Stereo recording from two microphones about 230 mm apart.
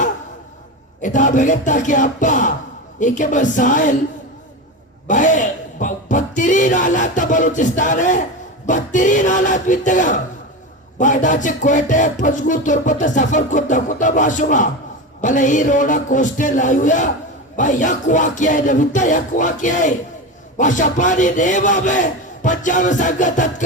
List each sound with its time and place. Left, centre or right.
1.0 s music: left
5.0 s speech: left
8.6 s music: left